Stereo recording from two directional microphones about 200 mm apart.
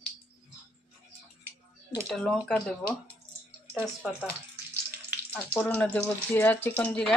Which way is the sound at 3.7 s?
5° left (ahead or behind).